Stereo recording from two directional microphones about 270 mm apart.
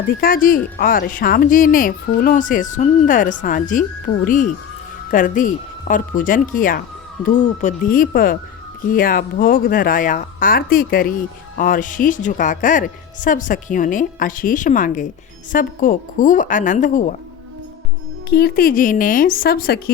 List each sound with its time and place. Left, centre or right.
0.2 s a woman's voice: left
5.1 s a woman's voice: left
18.3 s speech: left